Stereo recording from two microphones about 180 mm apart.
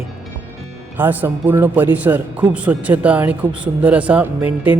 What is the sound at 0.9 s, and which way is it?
Speech, 10° right (ahead or behind).